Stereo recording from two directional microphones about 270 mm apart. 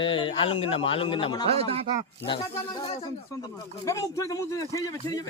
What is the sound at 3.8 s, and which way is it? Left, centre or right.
Speech, centre.